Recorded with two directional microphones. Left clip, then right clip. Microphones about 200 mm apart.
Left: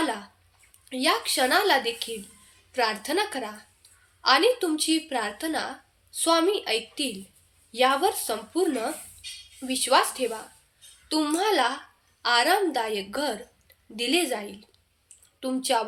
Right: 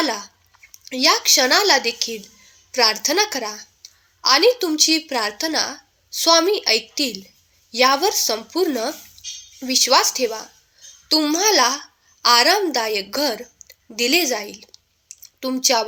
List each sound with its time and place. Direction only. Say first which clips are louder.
0.0 s a woman's voice: right 6 dB; 35° right (ahead or behind)
3.8 s a sound: right 14 dB; 35° right (ahead or behind)
4.2 s a woman's voice: right 5 dB; 35° right (ahead or behind)